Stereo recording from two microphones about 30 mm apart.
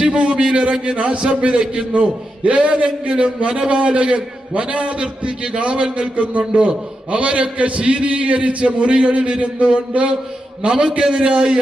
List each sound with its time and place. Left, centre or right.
0.0 s a man's voice: right
3.2 s a man's voice: right
10.7 s a man's voice: right